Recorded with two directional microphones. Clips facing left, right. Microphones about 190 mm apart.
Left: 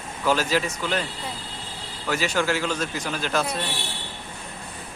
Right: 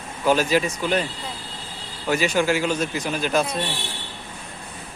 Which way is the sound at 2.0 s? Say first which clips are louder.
Right 4 dB; 15° right (ahead or behind).